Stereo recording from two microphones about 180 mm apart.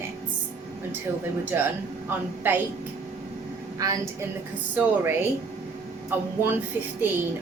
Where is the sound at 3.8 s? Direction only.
20° right (ahead or behind).